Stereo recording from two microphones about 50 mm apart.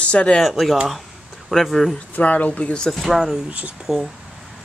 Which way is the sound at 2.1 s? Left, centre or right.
Left.